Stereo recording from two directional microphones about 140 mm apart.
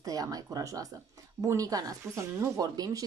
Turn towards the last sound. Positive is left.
turn(degrees=-25)  # may be behind; listen again after turning